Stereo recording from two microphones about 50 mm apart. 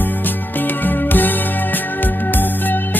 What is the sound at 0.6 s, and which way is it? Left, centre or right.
Music, left.